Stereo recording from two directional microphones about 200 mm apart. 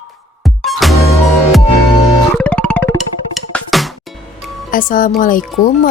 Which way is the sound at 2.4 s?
5° left (ahead or behind).